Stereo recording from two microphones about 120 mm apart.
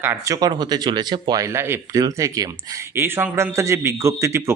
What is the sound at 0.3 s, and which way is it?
Speech, 35° right (ahead or behind).